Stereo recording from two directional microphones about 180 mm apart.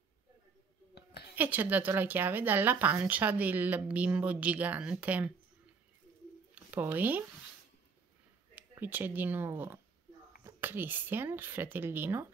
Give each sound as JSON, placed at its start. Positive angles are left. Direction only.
{"t": 0.9, "sound": "a sound", "side_deg": 65}
{"t": 1.3, "sound": "a woman's voice", "side_deg": -10}
{"t": 6.5, "sound": "speech", "side_deg": -10}
{"t": 8.5, "sound": "a woman's voice", "side_deg": -10}